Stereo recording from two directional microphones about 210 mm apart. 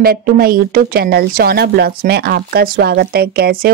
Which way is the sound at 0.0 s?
45° right (ahead or behind).